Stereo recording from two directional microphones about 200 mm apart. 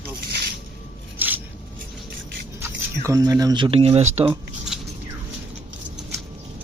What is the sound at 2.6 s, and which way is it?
Speech, 15° right (ahead or behind).